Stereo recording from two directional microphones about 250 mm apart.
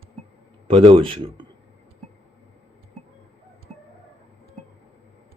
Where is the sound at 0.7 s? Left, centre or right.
Right.